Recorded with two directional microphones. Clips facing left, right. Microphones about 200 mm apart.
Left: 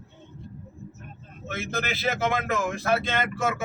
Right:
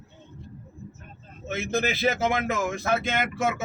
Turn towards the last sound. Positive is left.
turn(degrees=-15)  # may be behind; listen again after turning